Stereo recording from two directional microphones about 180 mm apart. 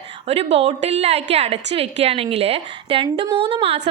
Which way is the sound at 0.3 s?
35° right (ahead or behind).